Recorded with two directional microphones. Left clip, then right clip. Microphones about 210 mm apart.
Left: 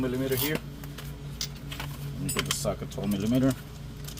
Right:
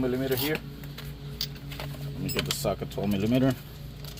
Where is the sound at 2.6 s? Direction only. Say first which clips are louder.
Right 2 dB; 55° right (ahead or behind).